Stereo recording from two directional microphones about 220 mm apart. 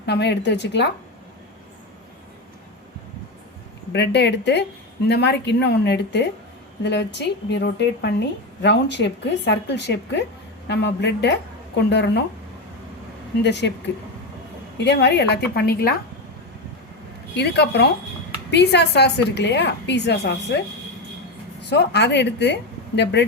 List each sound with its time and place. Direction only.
0.0 s a woman's voice: 50° left (ahead or behind)
3.9 s a woman's voice: 50° left (ahead or behind)
13.4 s a woman's voice: 50° left (ahead or behind)
14.8 s a woman's voice: 50° left (ahead or behind)
17.3 s a woman's voice: 50° left (ahead or behind)
21.7 s a woman's voice: 50° left (ahead or behind)